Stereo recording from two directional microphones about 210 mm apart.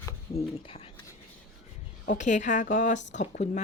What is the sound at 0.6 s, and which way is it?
Speech, 25° left (ahead or behind).